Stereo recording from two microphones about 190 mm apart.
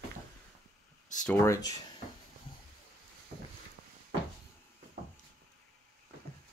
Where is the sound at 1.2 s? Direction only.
10° left (ahead or behind).